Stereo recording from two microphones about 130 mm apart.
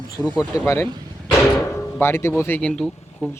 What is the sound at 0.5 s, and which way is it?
Speech, 20° left (ahead or behind).